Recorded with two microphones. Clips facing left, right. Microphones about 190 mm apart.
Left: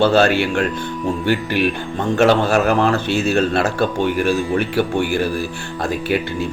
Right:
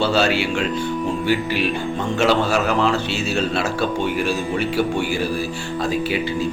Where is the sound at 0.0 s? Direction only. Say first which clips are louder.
Left 4 dB; 55° left (ahead or behind).